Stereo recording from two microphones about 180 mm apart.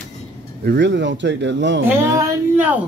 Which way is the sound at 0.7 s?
75° right (ahead or behind).